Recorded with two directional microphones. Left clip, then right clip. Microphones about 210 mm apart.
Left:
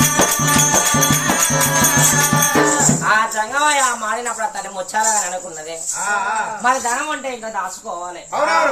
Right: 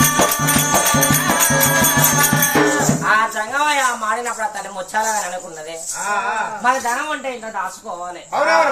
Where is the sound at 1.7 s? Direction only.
Centre (ahead or behind).